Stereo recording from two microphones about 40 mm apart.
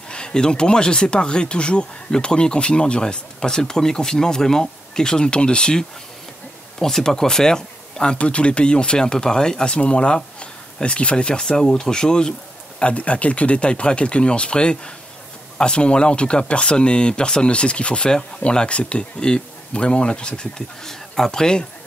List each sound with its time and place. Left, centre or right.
0.1 s speech: centre
11.4 s speech: centre